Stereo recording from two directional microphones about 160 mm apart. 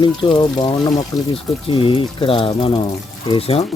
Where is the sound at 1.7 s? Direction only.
35° left (ahead or behind).